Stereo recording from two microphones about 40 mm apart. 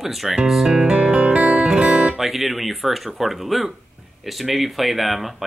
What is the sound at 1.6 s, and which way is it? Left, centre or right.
Guitar, centre.